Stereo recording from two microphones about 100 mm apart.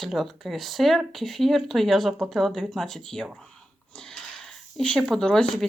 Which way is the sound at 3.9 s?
5° left (ahead or behind).